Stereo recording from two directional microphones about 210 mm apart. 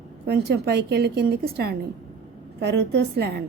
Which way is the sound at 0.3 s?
50° right (ahead or behind).